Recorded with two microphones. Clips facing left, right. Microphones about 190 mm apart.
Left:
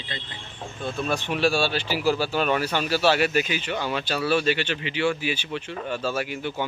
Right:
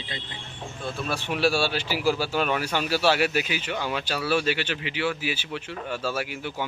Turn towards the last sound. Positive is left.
turn(degrees=-10)  # may be behind; listen again after turning